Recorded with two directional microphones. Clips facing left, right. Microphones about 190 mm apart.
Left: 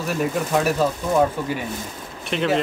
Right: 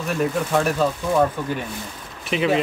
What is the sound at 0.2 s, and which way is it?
Speech, 5° left (ahead or behind).